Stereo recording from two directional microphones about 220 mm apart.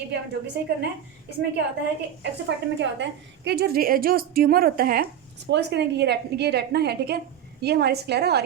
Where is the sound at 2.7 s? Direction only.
55° right (ahead or behind).